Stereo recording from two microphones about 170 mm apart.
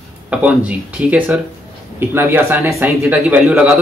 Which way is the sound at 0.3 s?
10° right (ahead or behind).